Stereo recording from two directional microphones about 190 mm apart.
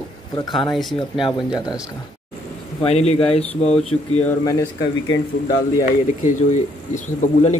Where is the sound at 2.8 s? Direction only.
35° left (ahead or behind).